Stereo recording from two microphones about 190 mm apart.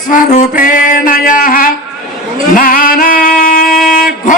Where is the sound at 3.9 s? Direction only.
45° left (ahead or behind).